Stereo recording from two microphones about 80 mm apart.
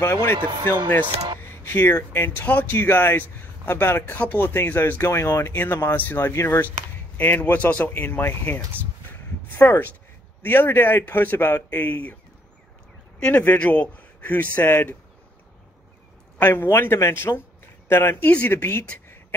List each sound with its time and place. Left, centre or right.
0.0 s a man's voice: left
1.4 s a sound: left
1.8 s speech: left
2.1 s a man's voice: left
9.6 s a man's voice: left
13.2 s a man's voice: centre
16.3 s a man's voice: left